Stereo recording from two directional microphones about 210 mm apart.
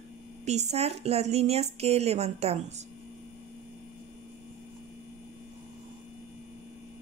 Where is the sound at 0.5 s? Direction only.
30° right (ahead or behind).